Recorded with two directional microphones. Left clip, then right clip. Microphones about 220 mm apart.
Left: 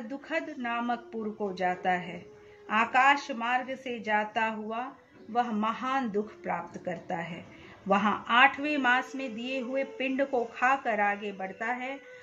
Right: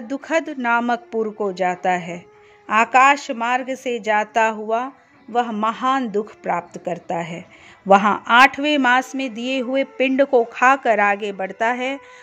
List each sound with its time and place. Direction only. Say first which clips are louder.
0.1 s speech: right 13 dB; 50° right (ahead or behind)